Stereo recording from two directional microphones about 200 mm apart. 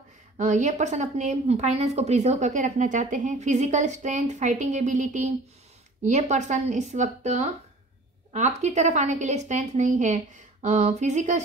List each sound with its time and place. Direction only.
0.4 s a woman's voice: 35° right (ahead or behind)